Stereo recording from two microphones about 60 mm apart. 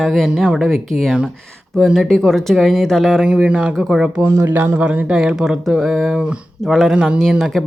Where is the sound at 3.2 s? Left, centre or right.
Centre.